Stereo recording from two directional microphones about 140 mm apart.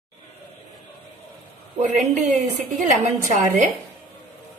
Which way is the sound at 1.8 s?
60° right (ahead or behind).